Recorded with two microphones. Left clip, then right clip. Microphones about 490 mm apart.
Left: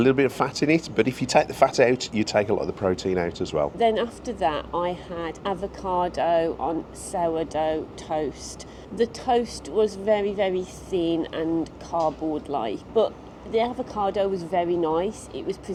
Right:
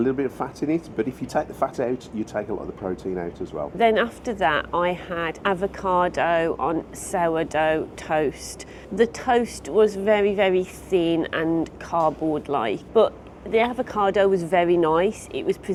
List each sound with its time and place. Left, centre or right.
0.0 s speech: left
3.8 s speech: right
12.5 s speech: right